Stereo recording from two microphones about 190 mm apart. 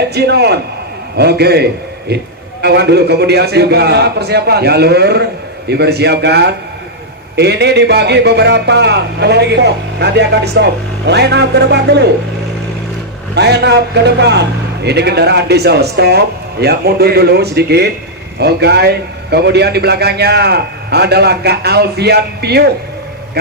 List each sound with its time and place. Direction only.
0.1 s a man's voice: 60° right (ahead or behind)
13.3 s a man's voice: 60° right (ahead or behind)